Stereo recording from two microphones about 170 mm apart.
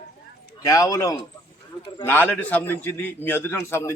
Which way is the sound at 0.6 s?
20° left (ahead or behind).